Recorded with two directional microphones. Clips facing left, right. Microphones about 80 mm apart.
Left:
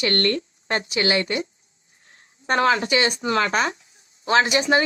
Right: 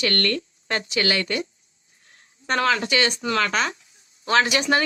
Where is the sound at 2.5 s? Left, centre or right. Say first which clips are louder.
Left 2 dB; left.